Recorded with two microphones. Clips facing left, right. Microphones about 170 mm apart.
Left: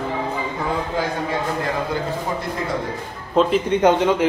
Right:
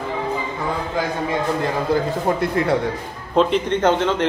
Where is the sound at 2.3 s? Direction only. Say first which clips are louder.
Right 9 dB; 55° right (ahead or behind).